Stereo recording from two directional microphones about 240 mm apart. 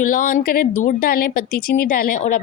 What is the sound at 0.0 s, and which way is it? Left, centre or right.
A woman's voice, left.